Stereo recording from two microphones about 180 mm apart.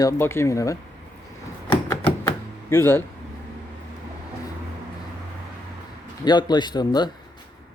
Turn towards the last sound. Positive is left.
turn(degrees=25)  # may be behind; listen again after turning